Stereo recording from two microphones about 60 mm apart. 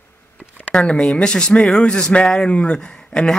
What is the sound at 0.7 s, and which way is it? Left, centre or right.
Speech, centre.